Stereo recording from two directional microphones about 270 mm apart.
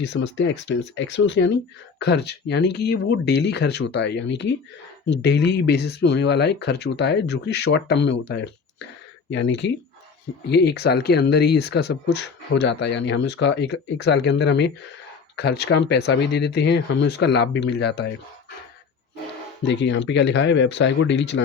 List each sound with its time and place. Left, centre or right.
0.0 s speech: left
19.6 s speech: left